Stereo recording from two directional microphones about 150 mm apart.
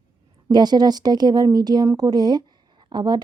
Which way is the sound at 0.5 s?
30° right (ahead or behind).